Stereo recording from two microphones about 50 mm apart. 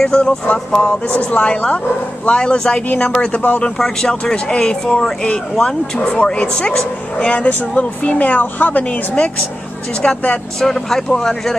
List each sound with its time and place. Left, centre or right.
0.1 s speech: centre
3.7 s speech: centre
4.1 s speech: centre
10.6 s speech: centre